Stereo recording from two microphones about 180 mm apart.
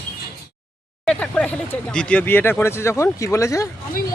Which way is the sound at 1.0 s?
5° left (ahead or behind).